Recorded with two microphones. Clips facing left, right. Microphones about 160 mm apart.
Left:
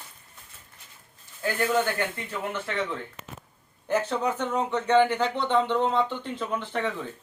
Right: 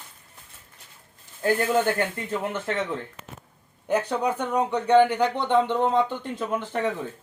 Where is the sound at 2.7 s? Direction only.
45° right (ahead or behind).